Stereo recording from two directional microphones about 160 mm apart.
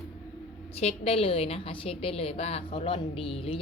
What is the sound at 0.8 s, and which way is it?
A woman's voice, 40° left (ahead or behind).